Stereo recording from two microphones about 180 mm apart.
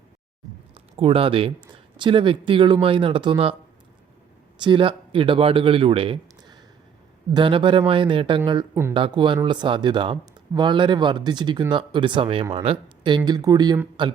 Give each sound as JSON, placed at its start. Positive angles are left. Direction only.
{"t": 0.7, "sound": "speech", "side_deg": -30}
{"t": 4.5, "sound": "speech", "side_deg": -25}